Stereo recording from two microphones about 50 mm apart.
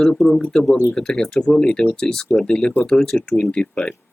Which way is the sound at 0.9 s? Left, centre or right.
Centre.